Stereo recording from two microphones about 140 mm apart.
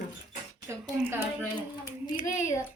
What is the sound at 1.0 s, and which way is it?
Speech, 15° right (ahead or behind).